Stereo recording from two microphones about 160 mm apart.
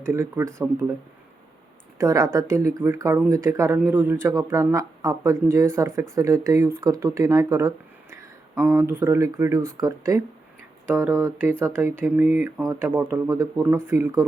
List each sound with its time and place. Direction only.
0.0 s speech: 15° right (ahead or behind)
2.0 s speech: 20° right (ahead or behind)
8.5 s speech: 5° right (ahead or behind)